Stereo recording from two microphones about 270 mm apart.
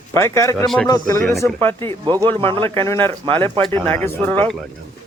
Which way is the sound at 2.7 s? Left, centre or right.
Centre.